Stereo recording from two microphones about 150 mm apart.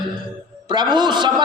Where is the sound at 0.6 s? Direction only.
30° right (ahead or behind).